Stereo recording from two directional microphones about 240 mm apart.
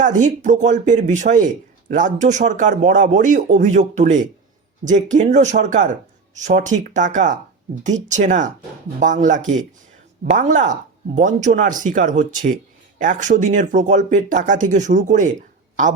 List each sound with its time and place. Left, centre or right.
0.0 s speech: right